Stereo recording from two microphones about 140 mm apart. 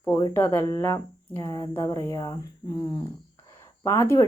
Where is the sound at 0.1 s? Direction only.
20° left (ahead or behind).